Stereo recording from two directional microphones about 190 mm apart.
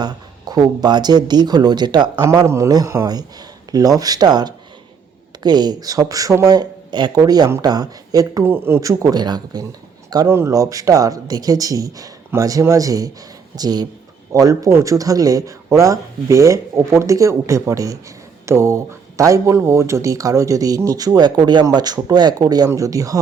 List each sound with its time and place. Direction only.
0.0 s speech: 20° right (ahead or behind)